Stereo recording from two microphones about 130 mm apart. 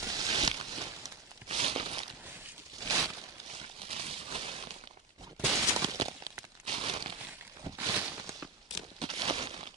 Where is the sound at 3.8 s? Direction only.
50° right (ahead or behind).